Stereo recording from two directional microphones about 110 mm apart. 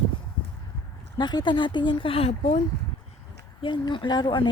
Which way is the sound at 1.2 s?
40° left (ahead or behind).